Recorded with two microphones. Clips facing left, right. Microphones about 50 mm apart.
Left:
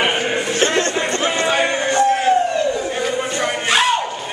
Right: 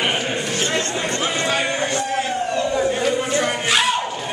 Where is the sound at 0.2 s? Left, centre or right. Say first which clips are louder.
Left 3 dB; left.